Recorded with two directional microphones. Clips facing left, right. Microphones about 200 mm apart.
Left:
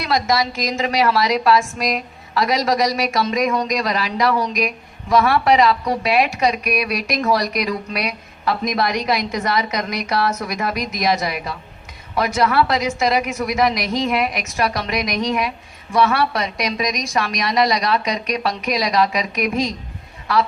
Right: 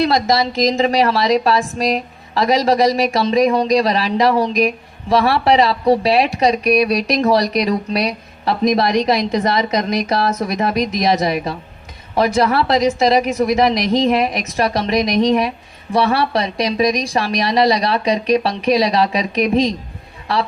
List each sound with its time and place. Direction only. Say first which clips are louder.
0.0 s a woman's voice: right 4 dB; 35° right (ahead or behind)